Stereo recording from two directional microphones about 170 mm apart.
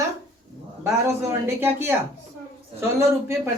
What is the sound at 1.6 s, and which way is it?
Speech, 10° right (ahead or behind).